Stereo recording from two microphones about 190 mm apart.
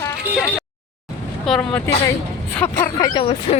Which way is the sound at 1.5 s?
5° left (ahead or behind).